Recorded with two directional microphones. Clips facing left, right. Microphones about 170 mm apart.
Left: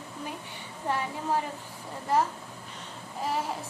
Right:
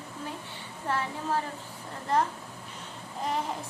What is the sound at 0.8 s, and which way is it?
Speech, 15° left (ahead or behind).